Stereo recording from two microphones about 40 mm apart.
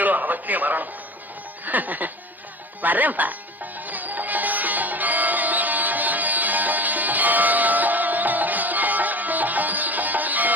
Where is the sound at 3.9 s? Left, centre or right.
Right.